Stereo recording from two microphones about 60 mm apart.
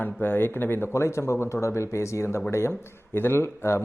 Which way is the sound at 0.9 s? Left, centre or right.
Left.